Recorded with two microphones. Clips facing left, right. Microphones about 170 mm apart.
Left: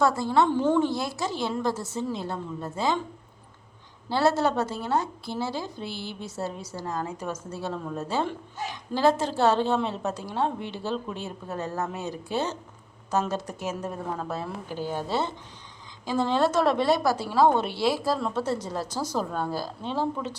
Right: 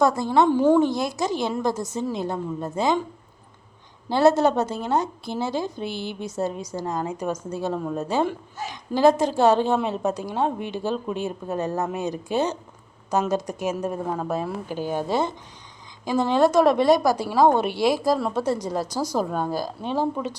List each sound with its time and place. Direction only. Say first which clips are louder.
0.0 s a woman's voice: right 3 dB; 15° right (ahead or behind)
4.1 s a woman's voice: right 5 dB; 20° right (ahead or behind)